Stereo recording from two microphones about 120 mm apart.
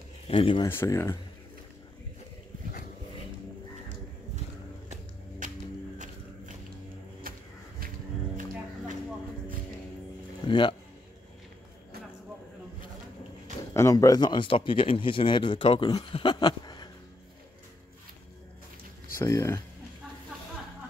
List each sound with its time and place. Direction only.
0.3 s speech: 45° left (ahead or behind)
0.7 s speech: 20° left (ahead or behind)
5.4 s whip: 90° right
10.4 s a sound: 40° left (ahead or behind)
13.7 s speech: 25° left (ahead or behind); by 15.9 s 45° left (ahead or behind)
15.9 s a sound: 45° left (ahead or behind)
19.1 s speech: 30° left (ahead or behind)